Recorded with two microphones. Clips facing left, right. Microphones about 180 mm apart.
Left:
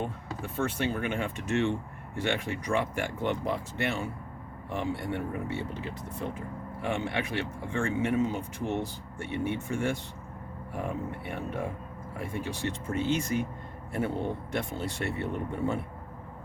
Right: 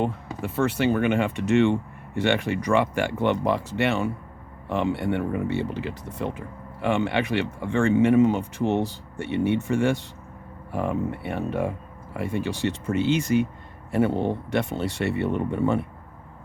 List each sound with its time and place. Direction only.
0.0 s speech: 80° right